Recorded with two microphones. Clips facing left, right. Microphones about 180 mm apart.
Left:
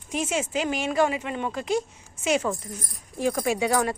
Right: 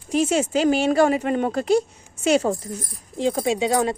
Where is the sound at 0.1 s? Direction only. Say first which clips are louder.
Right 7 dB; 35° right (ahead or behind).